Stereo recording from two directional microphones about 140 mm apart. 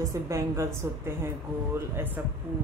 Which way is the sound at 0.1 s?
20° right (ahead or behind).